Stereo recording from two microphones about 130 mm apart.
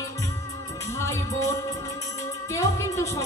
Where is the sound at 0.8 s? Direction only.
20° left (ahead or behind).